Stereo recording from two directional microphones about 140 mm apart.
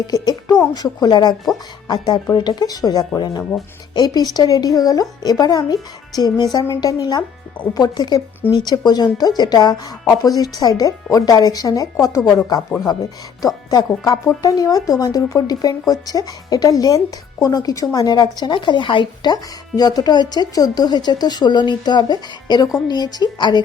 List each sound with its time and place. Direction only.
0.0 s speech: 30° left (ahead or behind)